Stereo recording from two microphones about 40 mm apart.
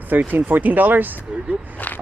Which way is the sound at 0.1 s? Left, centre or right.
Right.